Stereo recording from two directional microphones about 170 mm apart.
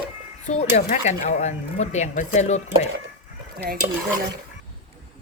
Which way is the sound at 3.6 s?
65° right (ahead or behind).